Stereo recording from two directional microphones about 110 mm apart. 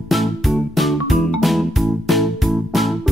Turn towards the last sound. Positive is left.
turn(degrees=0)  # may be behind; listen again after turning